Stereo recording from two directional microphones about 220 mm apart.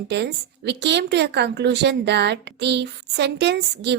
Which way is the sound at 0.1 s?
50° right (ahead or behind).